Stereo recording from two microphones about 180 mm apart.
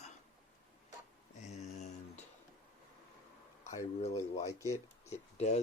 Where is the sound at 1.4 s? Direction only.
40° left (ahead or behind).